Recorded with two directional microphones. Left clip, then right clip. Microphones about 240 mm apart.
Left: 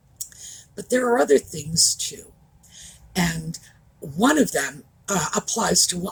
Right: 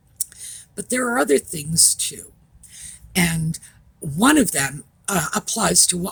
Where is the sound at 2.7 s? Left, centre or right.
Right.